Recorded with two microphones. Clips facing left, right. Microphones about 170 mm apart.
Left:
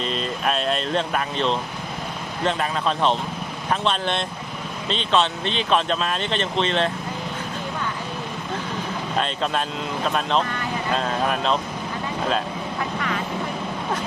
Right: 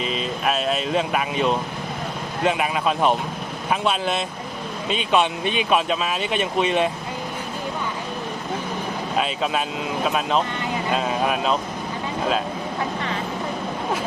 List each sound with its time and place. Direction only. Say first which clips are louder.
0.0 s speech: right 1 dB; 5° right (ahead or behind)
9.1 s speech: right 1 dB; 5° right (ahead or behind)